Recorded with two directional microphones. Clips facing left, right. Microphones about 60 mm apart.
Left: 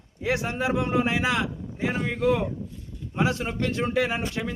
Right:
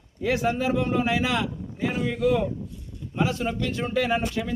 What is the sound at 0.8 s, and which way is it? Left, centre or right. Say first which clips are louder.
Speech: even; left.